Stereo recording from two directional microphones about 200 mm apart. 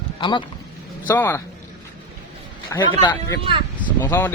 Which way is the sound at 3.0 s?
25° left (ahead or behind).